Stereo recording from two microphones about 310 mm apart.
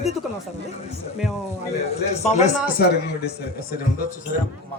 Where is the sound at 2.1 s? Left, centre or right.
Left.